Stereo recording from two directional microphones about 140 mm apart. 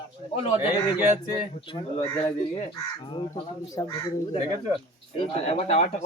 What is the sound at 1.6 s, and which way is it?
Speech, 40° left (ahead or behind).